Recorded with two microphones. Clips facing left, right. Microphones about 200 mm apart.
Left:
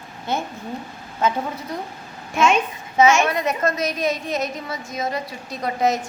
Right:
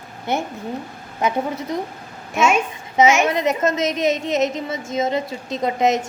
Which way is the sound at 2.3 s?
5° right (ahead or behind).